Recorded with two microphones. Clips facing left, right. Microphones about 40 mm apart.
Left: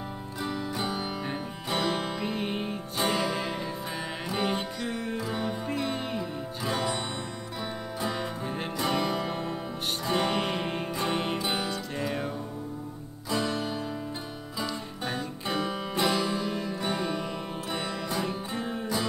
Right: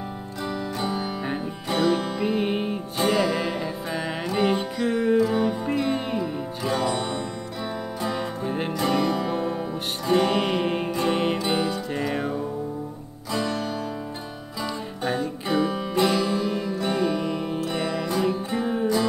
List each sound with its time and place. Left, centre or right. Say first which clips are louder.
0.4 s music: right 3 dB; centre
2.1 s music: right 7 dB; centre
3.0 s music: right 6 dB; centre
4.8 s music: right 10 dB; right
5.1 s music: right 10 dB; centre
6.6 s music: right 5 dB; centre
10.4 s music: right 6 dB; centre
11.4 s music: right 6 dB; centre
12.1 s music: right 5 dB; right
13.3 s music: right 3 dB; centre
15.0 s music: right 7 dB; centre
18.6 s music: right 8 dB; centre